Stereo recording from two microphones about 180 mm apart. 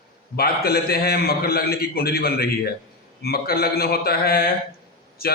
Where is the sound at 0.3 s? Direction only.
55° left (ahead or behind).